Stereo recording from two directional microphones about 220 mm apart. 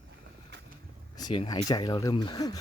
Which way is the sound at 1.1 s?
20° left (ahead or behind).